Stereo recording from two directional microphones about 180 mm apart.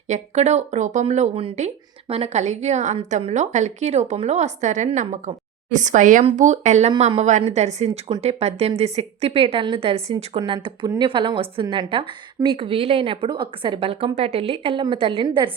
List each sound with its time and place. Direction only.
0.1 s speech: 40° right (ahead or behind)